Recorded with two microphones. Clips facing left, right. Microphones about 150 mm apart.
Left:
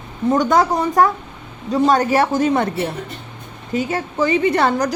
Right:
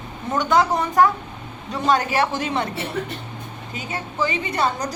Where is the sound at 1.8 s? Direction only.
40° left (ahead or behind).